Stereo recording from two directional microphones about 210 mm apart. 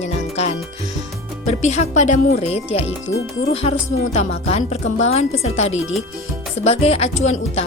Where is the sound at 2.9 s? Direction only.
70° left (ahead or behind).